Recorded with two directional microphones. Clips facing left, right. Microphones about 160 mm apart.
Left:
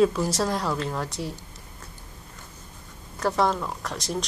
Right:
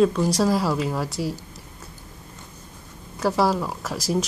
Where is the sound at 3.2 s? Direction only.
5° right (ahead or behind).